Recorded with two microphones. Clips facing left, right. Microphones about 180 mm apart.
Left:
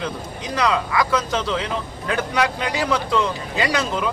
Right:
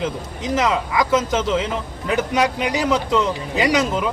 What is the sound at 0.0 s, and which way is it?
A man's voice, 20° right (ahead or behind).